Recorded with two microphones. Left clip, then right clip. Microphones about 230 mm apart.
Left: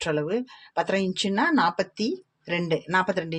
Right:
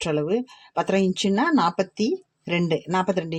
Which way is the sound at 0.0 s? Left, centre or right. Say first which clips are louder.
Right 2 dB; right.